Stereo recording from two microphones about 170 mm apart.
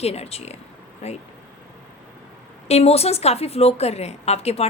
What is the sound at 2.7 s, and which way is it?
A woman's voice, 35° left (ahead or behind).